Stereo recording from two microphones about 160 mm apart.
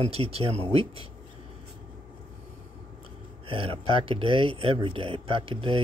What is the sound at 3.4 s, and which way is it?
Speech, 35° right (ahead or behind).